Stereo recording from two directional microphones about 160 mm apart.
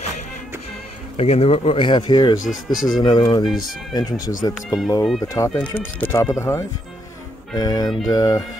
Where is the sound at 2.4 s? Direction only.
55° left (ahead or behind).